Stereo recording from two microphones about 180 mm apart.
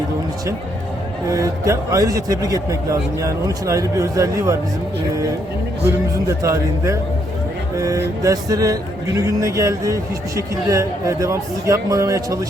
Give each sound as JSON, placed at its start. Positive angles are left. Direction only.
{"t": 1.3, "sound": "speech", "side_deg": -15}
{"t": 6.2, "sound": "speech", "side_deg": -15}